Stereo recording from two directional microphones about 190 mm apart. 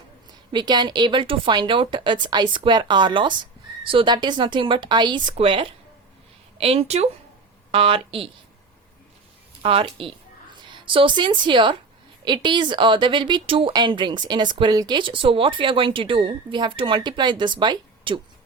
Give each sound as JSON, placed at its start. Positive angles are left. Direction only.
{"t": 0.5, "sound": "speech", "side_deg": -25}
{"t": 9.6, "sound": "speech", "side_deg": -30}